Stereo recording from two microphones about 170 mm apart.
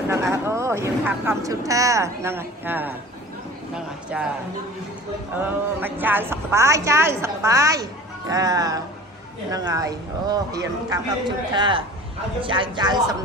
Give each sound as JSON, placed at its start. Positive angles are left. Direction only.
{"t": 0.1, "sound": "speech", "side_deg": -15}
{"t": 5.4, "sound": "a woman's voice", "side_deg": -10}